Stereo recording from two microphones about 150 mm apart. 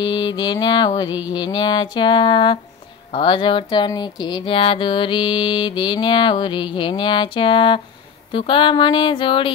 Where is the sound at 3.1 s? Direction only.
30° left (ahead or behind).